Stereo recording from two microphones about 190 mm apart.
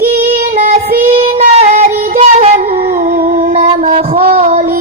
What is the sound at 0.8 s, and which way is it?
Child singing, 50° right (ahead or behind).